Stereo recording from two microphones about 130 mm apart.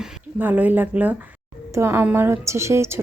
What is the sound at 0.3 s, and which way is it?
A woman's voice, 15° right (ahead or behind).